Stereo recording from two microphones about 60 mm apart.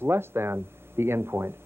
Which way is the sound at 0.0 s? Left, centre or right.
Right.